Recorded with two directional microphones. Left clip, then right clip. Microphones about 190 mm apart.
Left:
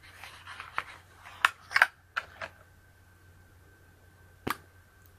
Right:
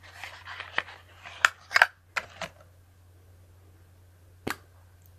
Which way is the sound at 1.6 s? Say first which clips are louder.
Right 3 dB; 20° right (ahead or behind).